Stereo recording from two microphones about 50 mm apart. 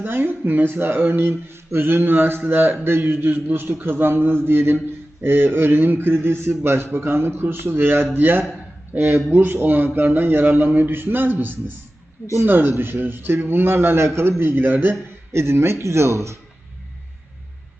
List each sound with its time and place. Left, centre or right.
0.0 s a man's voice: right
15.3 s speech: right